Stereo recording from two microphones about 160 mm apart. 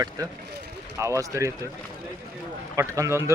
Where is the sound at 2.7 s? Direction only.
20° right (ahead or behind).